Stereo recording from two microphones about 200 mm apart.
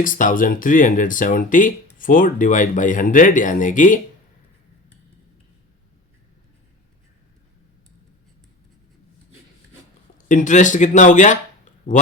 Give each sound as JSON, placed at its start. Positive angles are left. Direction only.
{"t": 0.0, "sound": "speech", "side_deg": 40}
{"t": 10.2, "sound": "speech", "side_deg": 40}